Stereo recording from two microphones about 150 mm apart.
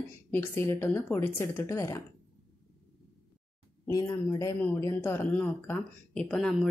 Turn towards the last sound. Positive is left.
turn(degrees=5)  # may be behind; listen again after turning